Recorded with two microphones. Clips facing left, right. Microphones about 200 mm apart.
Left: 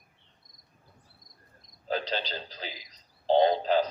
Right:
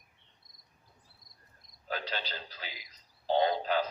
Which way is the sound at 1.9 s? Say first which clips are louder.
Left 6 dB; 35° left (ahead or behind).